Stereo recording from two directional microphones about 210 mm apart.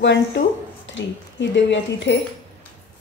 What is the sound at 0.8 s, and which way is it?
A woman's voice, 60° left (ahead or behind).